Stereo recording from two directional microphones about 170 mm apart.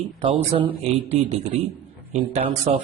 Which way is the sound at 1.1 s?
35° right (ahead or behind).